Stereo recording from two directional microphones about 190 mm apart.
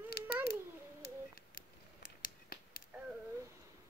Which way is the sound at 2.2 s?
50° left (ahead or behind).